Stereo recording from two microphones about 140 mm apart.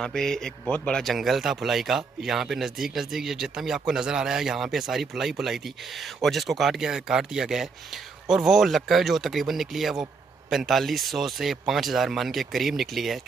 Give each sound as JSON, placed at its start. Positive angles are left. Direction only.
{"t": 0.0, "sound": "speech", "side_deg": 5}